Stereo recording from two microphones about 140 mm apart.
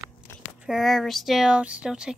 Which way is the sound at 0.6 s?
Centre (ahead or behind).